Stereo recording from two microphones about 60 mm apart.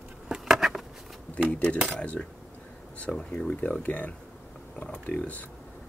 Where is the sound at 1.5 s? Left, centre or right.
Centre.